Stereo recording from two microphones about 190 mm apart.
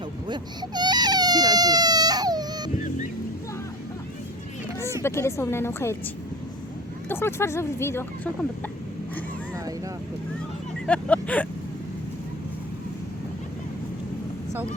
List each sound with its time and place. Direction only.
0.3 s frog: 20° right (ahead or behind)
2.7 s boat: 40° left (ahead or behind)
4.8 s a sound: 15° right (ahead or behind)
5.0 s speech: 15° left (ahead or behind)
7.1 s speech: 15° left (ahead or behind)
10.8 s speech: 5° left (ahead or behind)